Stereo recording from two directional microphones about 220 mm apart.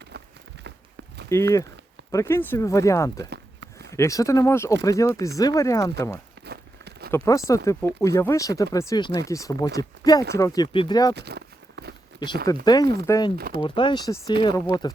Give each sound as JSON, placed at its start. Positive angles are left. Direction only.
{"t": 0.1, "sound": "walk", "side_deg": -50}
{"t": 1.3, "sound": "speech", "side_deg": 15}
{"t": 3.2, "sound": "a sound", "side_deg": -50}
{"t": 3.9, "sound": "speech", "side_deg": 15}
{"t": 6.4, "sound": "crumpling", "side_deg": -45}
{"t": 7.3, "sound": "speech", "side_deg": 15}
{"t": 11.1, "sound": "a sound", "side_deg": -50}
{"t": 12.6, "sound": "speech", "side_deg": 15}
{"t": 13.3, "sound": "speech", "side_deg": -40}
{"t": 13.6, "sound": "speech", "side_deg": 20}